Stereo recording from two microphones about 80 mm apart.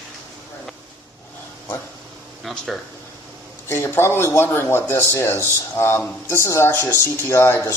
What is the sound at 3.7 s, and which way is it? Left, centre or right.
Speech, left.